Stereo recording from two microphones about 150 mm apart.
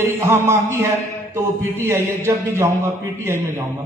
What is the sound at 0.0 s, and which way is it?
Speech, 15° right (ahead or behind).